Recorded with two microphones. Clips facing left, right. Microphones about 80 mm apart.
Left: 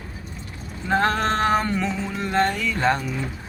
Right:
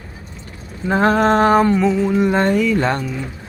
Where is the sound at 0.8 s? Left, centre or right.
Centre.